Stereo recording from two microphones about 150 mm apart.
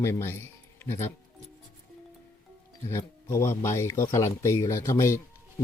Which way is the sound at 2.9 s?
20° left (ahead or behind).